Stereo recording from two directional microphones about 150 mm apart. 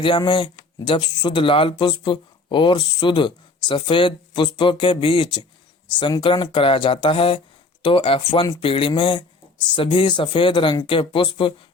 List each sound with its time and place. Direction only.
0.0 s speech: 35° left (ahead or behind)